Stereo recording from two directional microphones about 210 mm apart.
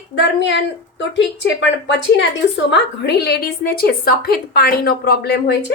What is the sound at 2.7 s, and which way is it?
A woman's voice, 55° left (ahead or behind).